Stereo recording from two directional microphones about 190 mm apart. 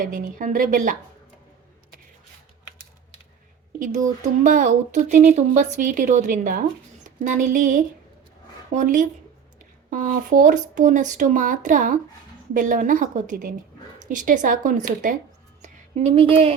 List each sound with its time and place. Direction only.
0.0 s speech: 45° right (ahead or behind)
3.8 s speech: 45° right (ahead or behind)
15.6 s a sound: 30° right (ahead or behind)